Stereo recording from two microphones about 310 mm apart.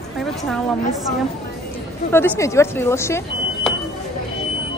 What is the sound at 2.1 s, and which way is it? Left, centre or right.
A woman's voice, centre.